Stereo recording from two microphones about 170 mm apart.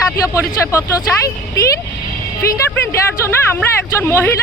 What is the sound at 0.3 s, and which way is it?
Speech, 15° left (ahead or behind).